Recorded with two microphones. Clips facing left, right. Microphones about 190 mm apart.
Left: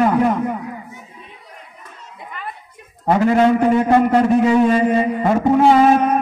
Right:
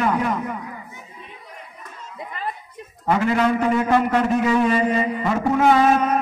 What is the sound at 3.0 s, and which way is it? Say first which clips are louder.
A man's voice: left 5 dB; 35° left (ahead or behind).